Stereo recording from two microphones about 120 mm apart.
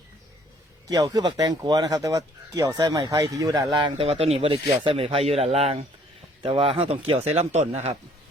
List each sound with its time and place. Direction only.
0.9 s speech: 30° right (ahead or behind)
3.9 s speech: 55° right (ahead or behind)